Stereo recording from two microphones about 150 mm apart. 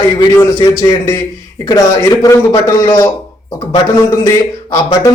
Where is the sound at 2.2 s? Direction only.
20° left (ahead or behind).